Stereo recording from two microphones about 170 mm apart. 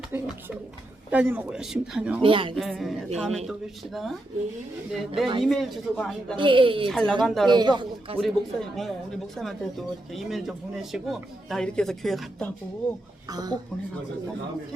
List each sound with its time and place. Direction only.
0.1 s speech: 10° right (ahead or behind)
2.2 s a woman's voice: 30° right (ahead or behind)
2.6 s speech: centre (ahead or behind)
6.3 s a woman's voice: 30° right (ahead or behind)
6.8 s speech: 5° left (ahead or behind)
7.5 s a man's voice: 25° right (ahead or behind)
8.2 s speech: centre (ahead or behind)
13.2 s a man's voice: 20° right (ahead or behind)